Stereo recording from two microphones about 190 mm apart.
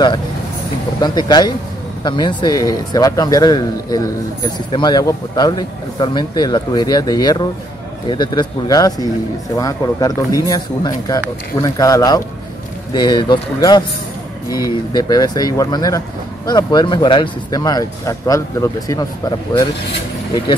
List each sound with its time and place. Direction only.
1.0 s speech: 20° left (ahead or behind)